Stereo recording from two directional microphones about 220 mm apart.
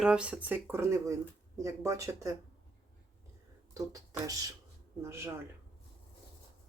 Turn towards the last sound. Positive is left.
turn(degrees=-10)  # may be behind; listen again after turning